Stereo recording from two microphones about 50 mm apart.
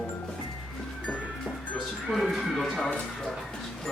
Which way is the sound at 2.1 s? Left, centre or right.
Centre.